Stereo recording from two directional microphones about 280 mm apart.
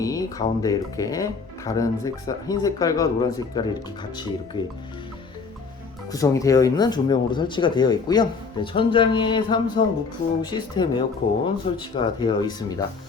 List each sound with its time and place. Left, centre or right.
0.0 s speech: centre
6.1 s speech: centre